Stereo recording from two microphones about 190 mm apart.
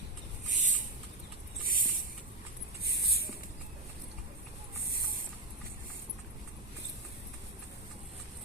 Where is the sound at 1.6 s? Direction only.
50° right (ahead or behind).